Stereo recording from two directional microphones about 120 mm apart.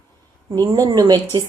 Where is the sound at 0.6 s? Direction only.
35° right (ahead or behind).